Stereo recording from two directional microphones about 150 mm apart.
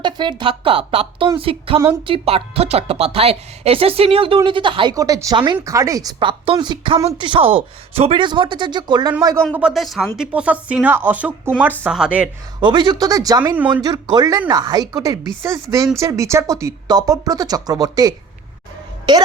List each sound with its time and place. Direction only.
0.0 s speech: 30° right (ahead or behind)
9.5 s speech: 5° right (ahead or behind)
12.5 s speech: 30° right (ahead or behind)